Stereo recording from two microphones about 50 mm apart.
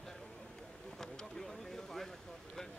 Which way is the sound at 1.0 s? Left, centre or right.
Centre.